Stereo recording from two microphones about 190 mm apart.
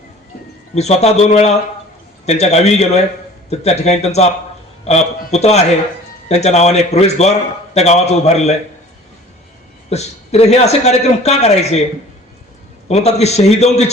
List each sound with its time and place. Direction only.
0.7 s a man's voice: 35° left (ahead or behind)
9.9 s a man's voice: 35° left (ahead or behind)
12.9 s a man's voice: 35° left (ahead or behind)